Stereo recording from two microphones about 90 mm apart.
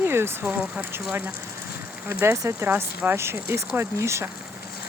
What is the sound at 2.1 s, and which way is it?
Speech, 25° right (ahead or behind).